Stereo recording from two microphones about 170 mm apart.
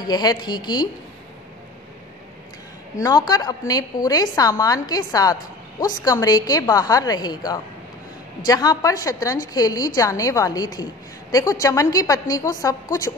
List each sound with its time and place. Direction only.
0.0 s a woman's voice: 25° left (ahead or behind)
3.0 s a woman's voice: 20° left (ahead or behind)